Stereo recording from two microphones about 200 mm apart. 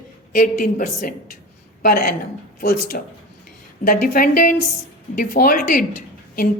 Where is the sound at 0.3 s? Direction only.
45° left (ahead or behind).